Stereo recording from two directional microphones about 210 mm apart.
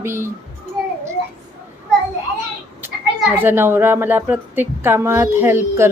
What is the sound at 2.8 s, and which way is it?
A woman's voice, 10° right (ahead or behind).